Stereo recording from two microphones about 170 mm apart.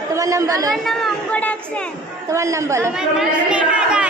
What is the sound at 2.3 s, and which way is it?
Speech, 15° right (ahead or behind).